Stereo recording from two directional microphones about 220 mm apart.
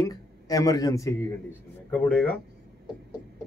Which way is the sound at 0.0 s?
15° left (ahead or behind).